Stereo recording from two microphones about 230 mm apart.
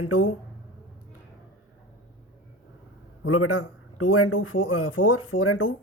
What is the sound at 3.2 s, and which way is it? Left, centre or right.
Speech, left.